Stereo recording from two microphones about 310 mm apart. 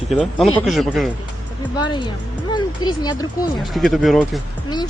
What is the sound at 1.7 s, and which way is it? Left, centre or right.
Speech, centre.